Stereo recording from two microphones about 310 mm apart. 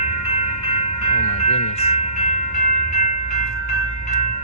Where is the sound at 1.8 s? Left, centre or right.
Left.